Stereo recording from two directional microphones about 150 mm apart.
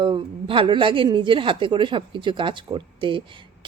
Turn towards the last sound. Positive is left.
turn(degrees=-35)  # may be behind; listen again after turning